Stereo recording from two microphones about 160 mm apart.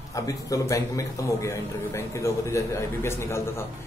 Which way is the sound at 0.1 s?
20° left (ahead or behind).